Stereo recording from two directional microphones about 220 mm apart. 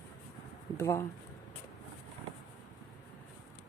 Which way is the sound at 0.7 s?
15° left (ahead or behind).